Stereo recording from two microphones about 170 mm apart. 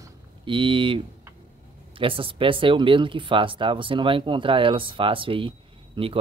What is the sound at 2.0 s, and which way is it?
Speech, 30° right (ahead or behind).